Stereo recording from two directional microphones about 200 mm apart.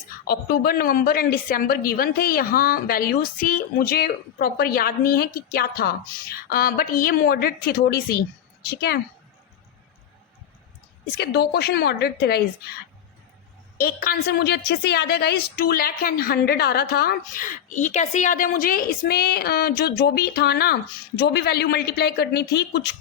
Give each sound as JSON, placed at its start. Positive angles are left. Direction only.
{"t": 0.3, "sound": "a woman's voice", "side_deg": 50}
{"t": 11.2, "sound": "a woman's voice", "side_deg": 55}
{"t": 13.7, "sound": "a woman's voice", "side_deg": 45}